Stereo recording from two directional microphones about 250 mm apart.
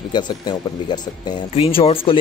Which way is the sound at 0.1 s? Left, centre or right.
Centre.